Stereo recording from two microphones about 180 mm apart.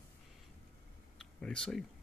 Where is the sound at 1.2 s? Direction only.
5° left (ahead or behind).